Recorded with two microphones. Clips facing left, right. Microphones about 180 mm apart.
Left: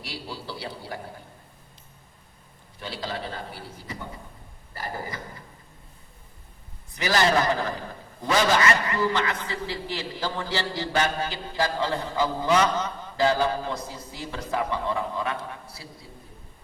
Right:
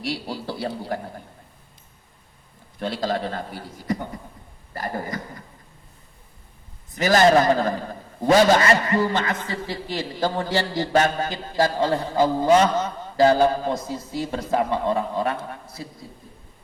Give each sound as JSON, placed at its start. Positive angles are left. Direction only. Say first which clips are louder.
{"t": 0.1, "sound": "a man's voice", "louder": "right 6 dB", "side_deg": -50}
{"t": 2.7, "sound": "a man's voice", "louder": "right 8 dB", "side_deg": -50}
{"t": 6.9, "sound": "a man's voice", "louder": "right 6 dB", "side_deg": -45}